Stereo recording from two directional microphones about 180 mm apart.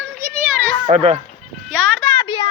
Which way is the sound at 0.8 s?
35° right (ahead or behind).